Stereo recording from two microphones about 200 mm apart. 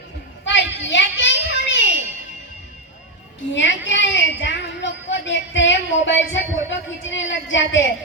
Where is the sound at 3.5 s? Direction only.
65° left (ahead or behind).